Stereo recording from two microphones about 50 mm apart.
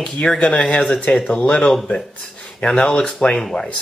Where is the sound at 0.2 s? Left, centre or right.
Left.